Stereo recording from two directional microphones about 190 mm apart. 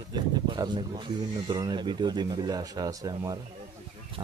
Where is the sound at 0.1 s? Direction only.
25° right (ahead or behind).